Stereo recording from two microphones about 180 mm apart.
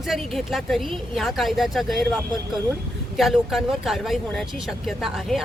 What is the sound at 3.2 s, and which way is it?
Speech, centre (ahead or behind).